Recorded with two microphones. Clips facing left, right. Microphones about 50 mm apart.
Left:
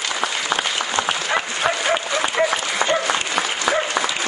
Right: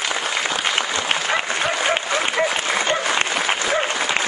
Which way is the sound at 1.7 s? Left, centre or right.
Right.